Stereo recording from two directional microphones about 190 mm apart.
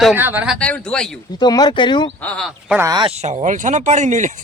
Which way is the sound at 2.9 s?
25° right (ahead or behind).